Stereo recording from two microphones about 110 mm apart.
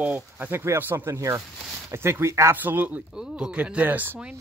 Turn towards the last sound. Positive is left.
turn(degrees=-15)  # may be behind; listen again after turning